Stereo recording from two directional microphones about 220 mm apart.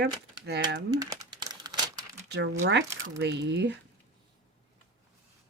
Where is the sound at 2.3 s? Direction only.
55° right (ahead or behind).